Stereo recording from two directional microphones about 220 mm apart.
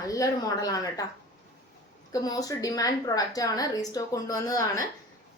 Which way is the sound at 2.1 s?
15° left (ahead or behind).